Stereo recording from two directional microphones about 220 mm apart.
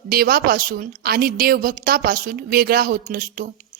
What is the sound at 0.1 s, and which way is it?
A woman's voice, 45° right (ahead or behind).